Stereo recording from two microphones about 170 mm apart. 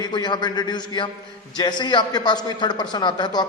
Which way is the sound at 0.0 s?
25° left (ahead or behind).